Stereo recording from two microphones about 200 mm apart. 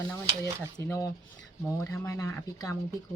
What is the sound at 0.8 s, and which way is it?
Speech, 15° left (ahead or behind).